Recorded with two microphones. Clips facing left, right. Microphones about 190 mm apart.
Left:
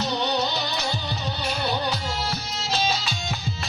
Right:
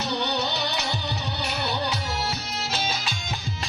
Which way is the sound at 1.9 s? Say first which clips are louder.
Left 1 dB; 65° right (ahead or behind).